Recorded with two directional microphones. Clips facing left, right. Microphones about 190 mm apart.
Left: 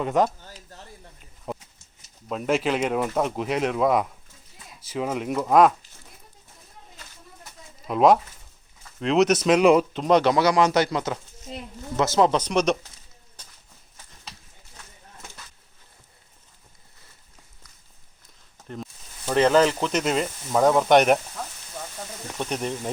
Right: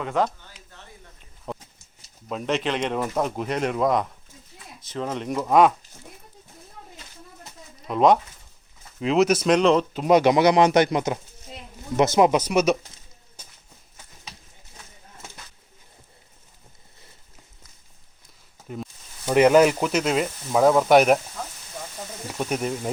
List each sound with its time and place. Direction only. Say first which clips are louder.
0.0 s speech: left 2 dB; 15° left (ahead or behind)
0.4 s speech: left 5 dB; 35° left (ahead or behind)
1.5 s a sound: left 1 dB; 5° left (ahead or behind)
2.3 s speech: left 2 dB; 5° left (ahead or behind)
7.8 s speech: even; centre (ahead or behind)
9.9 s speech: right 2 dB; 10° right (ahead or behind)
18.7 s speech: right 2 dB; 10° right (ahead or behind)
19.9 s speech: right 1 dB; centre (ahead or behind)